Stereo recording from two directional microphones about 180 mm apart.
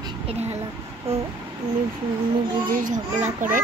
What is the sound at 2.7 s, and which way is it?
Speech, 50° right (ahead or behind).